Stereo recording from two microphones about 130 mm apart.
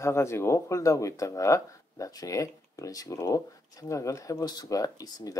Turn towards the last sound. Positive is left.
turn(degrees=30)  # may be behind; listen again after turning